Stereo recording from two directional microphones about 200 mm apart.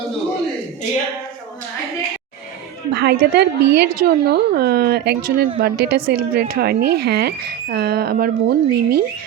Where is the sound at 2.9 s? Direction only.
55° right (ahead or behind).